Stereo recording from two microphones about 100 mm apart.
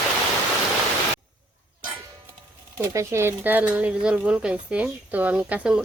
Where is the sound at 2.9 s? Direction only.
25° right (ahead or behind).